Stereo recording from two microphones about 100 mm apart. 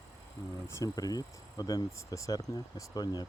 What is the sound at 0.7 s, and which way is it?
Speech, 35° left (ahead or behind).